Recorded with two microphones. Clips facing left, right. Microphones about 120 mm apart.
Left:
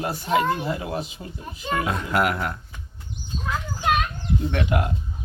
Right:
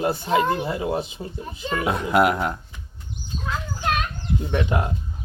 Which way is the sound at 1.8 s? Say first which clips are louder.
Right 6 dB; 20° right (ahead or behind).